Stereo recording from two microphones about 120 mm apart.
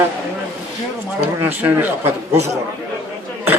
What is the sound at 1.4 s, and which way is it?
A man's voice, 15° right (ahead or behind).